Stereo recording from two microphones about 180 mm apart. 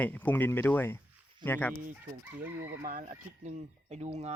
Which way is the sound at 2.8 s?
45° right (ahead or behind).